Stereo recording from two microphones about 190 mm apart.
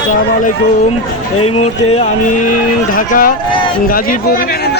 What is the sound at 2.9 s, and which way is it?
Speech, 45° left (ahead or behind).